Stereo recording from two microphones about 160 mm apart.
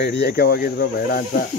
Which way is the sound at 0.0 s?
85° left.